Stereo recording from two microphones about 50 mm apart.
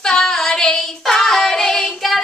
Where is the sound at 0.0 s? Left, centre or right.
Centre.